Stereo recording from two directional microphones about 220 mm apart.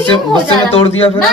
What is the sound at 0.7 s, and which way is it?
Speech, 25° left (ahead or behind).